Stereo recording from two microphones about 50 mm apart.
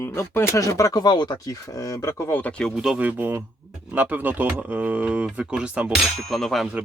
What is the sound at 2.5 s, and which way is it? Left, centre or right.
Speech, centre.